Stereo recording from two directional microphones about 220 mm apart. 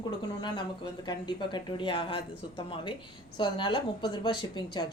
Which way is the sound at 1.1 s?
20° left (ahead or behind).